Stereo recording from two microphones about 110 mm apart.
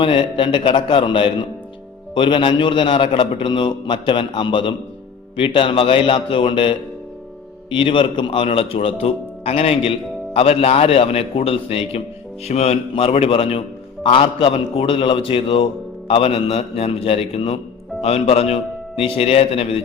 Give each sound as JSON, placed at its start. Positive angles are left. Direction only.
{"t": 0.0, "sound": "a man's voice", "side_deg": 50}